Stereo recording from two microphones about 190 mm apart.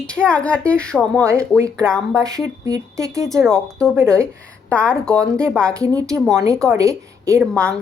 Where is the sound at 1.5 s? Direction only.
15° right (ahead or behind).